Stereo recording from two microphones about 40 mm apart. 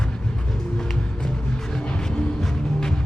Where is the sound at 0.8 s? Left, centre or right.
Centre.